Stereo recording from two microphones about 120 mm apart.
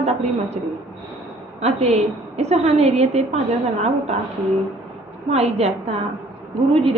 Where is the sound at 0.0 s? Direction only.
65° right (ahead or behind).